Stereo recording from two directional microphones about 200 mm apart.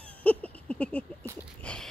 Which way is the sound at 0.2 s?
5° left (ahead or behind).